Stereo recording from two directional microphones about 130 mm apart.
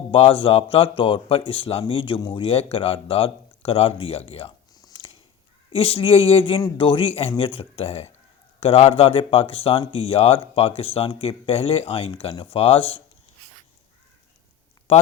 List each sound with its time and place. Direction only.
0.1 s speech: 45° left (ahead or behind)
4.7 s a sound: 30° left (ahead or behind)
5.7 s speech: 45° left (ahead or behind)
14.9 s a man's voice: 50° left (ahead or behind)